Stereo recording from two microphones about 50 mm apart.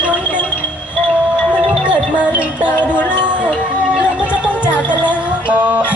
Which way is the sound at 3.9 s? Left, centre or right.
Right.